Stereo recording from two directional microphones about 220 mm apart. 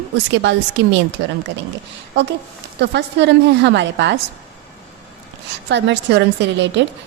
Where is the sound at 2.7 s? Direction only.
50° right (ahead or behind).